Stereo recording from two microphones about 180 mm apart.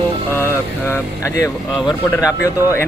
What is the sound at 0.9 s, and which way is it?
Speech, 15° left (ahead or behind).